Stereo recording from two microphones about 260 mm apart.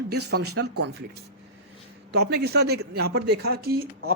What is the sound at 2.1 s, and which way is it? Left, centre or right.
A man's voice, right.